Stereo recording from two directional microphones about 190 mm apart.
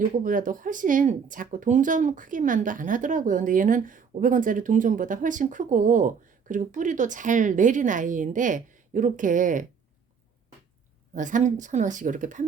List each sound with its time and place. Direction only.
0.0 s speech: 45° right (ahead or behind)
11.1 s a woman's voice: 40° right (ahead or behind)